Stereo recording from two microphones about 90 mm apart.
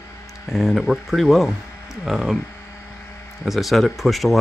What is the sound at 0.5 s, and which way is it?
Speech, centre (ahead or behind).